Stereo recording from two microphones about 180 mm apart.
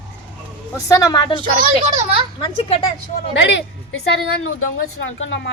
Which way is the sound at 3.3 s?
80° left.